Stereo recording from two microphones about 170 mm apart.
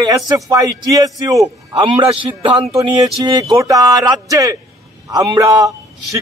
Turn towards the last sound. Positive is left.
turn(degrees=-20)  # may be behind; listen again after turning